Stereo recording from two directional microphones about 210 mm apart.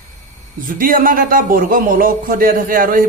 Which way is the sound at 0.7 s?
40° right (ahead or behind).